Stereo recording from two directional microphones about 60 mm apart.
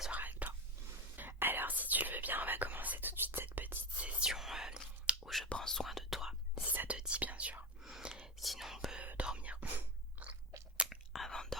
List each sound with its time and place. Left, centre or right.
0.1 s whispering: right
4.3 s whispering: centre
5.5 s whispering: centre
6.7 s whispering: right
8.1 s whispering: centre
9.0 s whispering: right
10.2 s crunch: right
10.8 s whispering: centre
11.3 s whispering: centre